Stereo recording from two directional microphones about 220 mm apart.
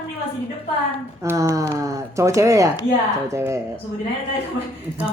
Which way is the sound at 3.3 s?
10° right (ahead or behind).